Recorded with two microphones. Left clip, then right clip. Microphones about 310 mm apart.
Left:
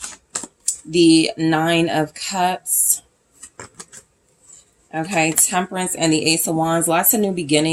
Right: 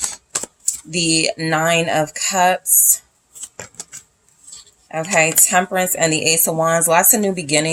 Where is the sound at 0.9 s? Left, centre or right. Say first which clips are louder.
Left 4 dB; right.